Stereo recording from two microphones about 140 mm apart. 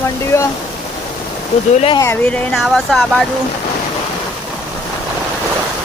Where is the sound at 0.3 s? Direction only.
20° left (ahead or behind).